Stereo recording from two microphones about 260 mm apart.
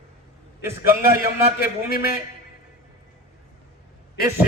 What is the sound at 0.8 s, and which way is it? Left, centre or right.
A man's voice, left.